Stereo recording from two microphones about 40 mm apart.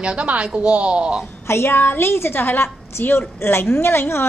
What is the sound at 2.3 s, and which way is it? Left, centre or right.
A woman's voice, left.